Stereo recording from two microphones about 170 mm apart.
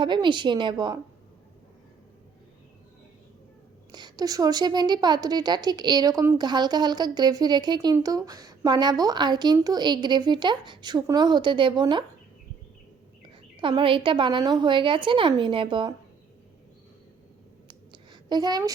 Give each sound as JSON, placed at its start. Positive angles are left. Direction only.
{"t": 0.0, "sound": "speech", "side_deg": -25}
{"t": 3.9, "sound": "speech", "side_deg": -25}
{"t": 13.6, "sound": "speech", "side_deg": -30}
{"t": 17.7, "sound": "a sound", "side_deg": -25}